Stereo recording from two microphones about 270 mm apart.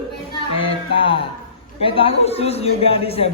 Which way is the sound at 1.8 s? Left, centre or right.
Centre.